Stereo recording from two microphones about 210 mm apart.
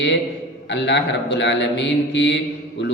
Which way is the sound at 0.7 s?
55° left (ahead or behind).